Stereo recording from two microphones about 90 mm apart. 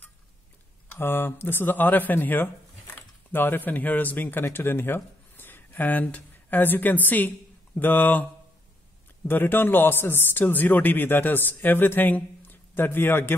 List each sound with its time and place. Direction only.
0.9 s speech: 25° left (ahead or behind)
9.3 s speech: 25° left (ahead or behind)